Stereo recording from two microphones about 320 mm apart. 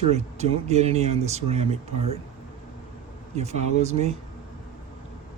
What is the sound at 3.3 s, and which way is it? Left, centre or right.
Speech, right.